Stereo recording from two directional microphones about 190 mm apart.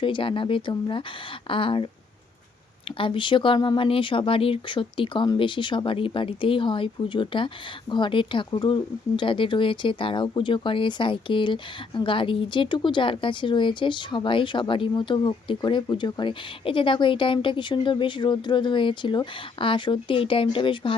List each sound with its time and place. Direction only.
0.0 s speech: 25° left (ahead or behind)
3.0 s speech: 25° left (ahead or behind)